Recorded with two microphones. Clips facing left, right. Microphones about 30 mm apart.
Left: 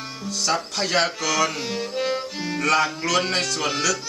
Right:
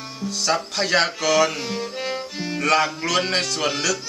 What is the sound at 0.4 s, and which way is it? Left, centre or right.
Speech, centre.